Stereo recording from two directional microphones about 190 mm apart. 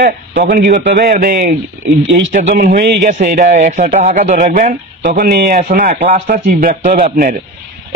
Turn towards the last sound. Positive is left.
turn(degrees=-45)  # may be behind; listen again after turning